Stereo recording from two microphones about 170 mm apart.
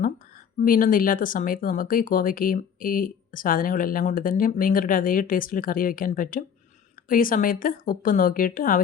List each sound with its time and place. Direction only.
0.6 s speech: 55° left (ahead or behind)